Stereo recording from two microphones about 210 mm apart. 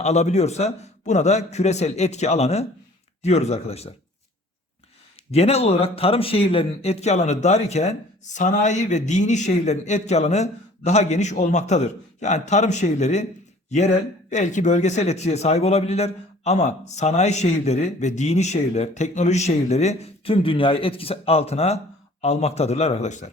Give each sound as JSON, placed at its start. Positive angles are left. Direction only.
{"t": 0.0, "sound": "speech", "side_deg": 30}
{"t": 5.3, "sound": "speech", "side_deg": 30}